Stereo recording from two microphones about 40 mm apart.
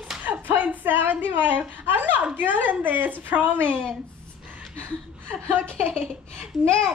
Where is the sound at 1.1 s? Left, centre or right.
Right.